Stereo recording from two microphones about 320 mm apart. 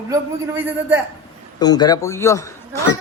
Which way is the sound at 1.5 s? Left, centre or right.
Centre.